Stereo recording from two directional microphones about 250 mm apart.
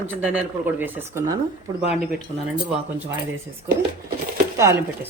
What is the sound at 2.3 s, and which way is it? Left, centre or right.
Speech, right.